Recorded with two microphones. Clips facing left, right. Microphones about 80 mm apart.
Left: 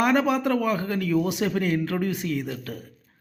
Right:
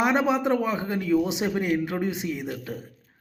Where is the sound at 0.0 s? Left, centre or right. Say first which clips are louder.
Left 1 dB; right.